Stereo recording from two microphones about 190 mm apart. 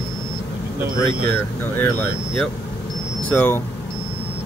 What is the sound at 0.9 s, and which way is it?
Speech, 10° left (ahead or behind).